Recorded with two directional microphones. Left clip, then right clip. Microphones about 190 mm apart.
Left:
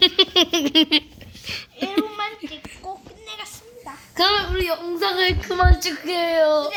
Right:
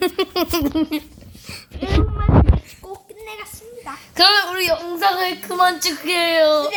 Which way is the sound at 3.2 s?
35° right (ahead or behind).